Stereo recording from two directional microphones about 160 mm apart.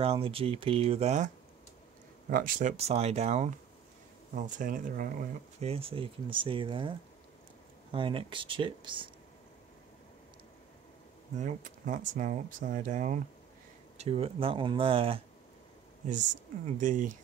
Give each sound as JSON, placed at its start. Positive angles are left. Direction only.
{"t": 0.0, "sound": "speech", "side_deg": -35}
{"t": 2.3, "sound": "speech", "side_deg": -60}
{"t": 2.8, "sound": "speech", "side_deg": -40}
{"t": 4.4, "sound": "speech", "side_deg": -55}
{"t": 5.6, "sound": "speech", "side_deg": -35}
{"t": 11.3, "sound": "speech", "side_deg": -50}
{"t": 13.9, "sound": "speech", "side_deg": -40}
{"t": 16.8, "sound": "speech", "side_deg": -55}